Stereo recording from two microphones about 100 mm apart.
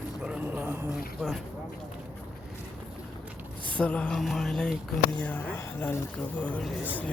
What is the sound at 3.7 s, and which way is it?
Speech, 10° left (ahead or behind).